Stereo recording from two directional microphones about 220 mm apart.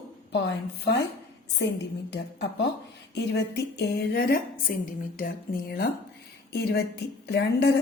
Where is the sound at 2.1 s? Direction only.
50° left (ahead or behind).